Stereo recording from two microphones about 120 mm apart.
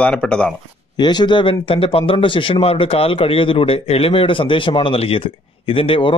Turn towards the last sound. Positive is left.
turn(degrees=50)  # may be behind; listen again after turning